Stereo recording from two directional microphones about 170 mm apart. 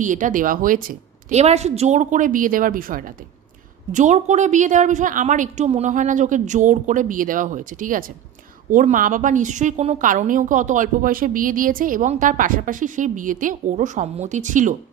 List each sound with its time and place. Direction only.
0.0 s a woman's voice: 50° right (ahead or behind)
1.3 s a woman's voice: 40° right (ahead or behind); by 3.1 s 55° right (ahead or behind)
3.9 s a woman's voice: 45° right (ahead or behind)